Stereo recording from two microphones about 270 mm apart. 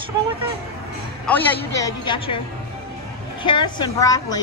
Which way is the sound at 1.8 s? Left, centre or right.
Centre.